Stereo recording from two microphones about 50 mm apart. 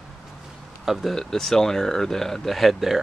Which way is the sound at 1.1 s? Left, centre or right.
Centre.